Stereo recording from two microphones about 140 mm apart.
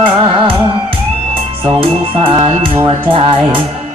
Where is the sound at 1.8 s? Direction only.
40° right (ahead or behind).